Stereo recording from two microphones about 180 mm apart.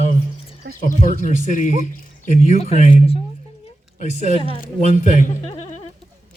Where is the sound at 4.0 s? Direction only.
40° left (ahead or behind).